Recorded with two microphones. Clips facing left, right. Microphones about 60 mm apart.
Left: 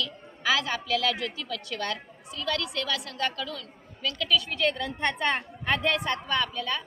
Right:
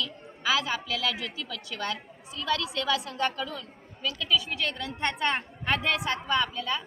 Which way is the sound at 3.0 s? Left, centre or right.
Right.